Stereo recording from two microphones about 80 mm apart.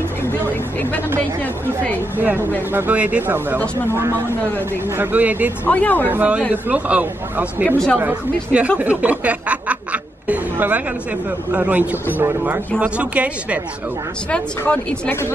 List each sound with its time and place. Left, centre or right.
2.1 s speech: right
3.5 s speech: right
4.9 s speech: right
5.7 s speech: left
6.0 s speech: centre
10.2 s chatter: centre
11.5 s speech: centre